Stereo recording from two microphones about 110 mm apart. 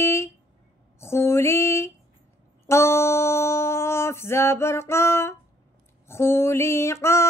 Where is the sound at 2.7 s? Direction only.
25° left (ahead or behind).